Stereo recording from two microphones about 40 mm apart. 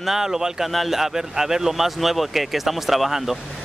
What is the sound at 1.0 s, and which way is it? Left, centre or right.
Speech, centre.